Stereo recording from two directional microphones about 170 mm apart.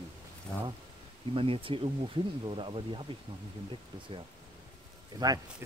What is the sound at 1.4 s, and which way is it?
Speech, 30° right (ahead or behind).